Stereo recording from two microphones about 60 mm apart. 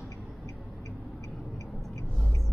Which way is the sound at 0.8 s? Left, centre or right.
Left.